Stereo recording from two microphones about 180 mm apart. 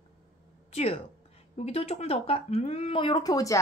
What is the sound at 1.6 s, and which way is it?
A woman's voice, 35° left (ahead or behind).